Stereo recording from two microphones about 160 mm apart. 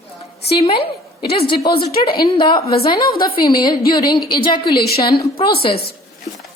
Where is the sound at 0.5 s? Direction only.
35° left (ahead or behind).